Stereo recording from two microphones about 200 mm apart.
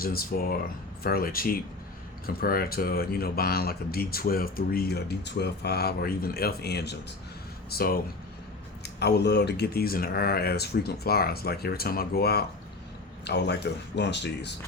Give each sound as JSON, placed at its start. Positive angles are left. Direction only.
{"t": 0.0, "sound": "speech", "side_deg": 50}